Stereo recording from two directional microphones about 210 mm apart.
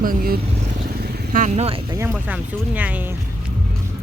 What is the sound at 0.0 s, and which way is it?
Speech, 45° right (ahead or behind).